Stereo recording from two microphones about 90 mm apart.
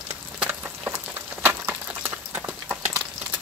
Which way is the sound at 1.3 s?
20° right (ahead or behind).